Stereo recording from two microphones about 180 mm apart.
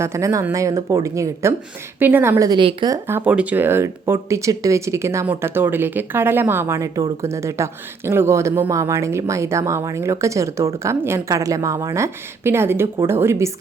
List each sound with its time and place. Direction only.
0.0 s speech: 15° right (ahead or behind)